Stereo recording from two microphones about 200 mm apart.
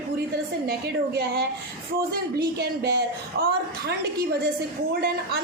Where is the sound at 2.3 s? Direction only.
55° right (ahead or behind).